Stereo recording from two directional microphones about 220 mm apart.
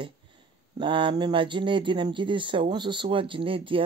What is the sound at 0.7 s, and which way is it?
Speech, 20° right (ahead or behind).